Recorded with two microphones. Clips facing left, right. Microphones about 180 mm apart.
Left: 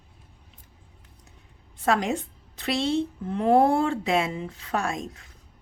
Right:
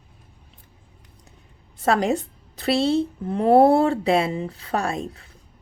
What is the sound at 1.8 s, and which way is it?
A woman's voice, 35° right (ahead or behind).